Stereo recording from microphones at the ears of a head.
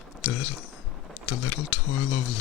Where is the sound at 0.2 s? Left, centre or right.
Left.